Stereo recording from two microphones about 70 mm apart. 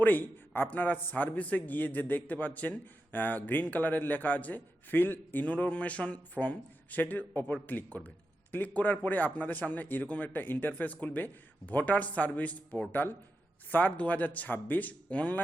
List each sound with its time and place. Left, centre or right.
0.0 s a man's voice: left